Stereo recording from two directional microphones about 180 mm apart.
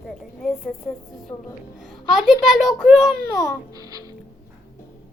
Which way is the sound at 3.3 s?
15° left (ahead or behind).